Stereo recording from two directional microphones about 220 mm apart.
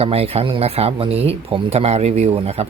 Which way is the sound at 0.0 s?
25° right (ahead or behind).